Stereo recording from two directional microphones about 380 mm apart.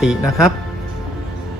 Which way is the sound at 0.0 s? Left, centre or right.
Centre.